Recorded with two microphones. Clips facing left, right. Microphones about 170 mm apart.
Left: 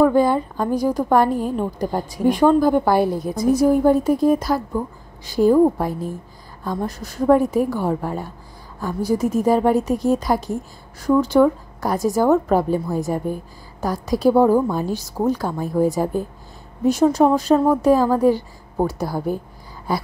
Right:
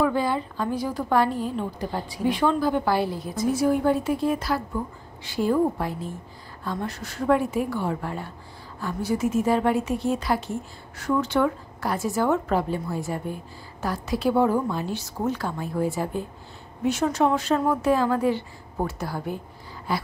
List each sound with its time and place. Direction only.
0.0 s a woman's voice: 45° left (ahead or behind)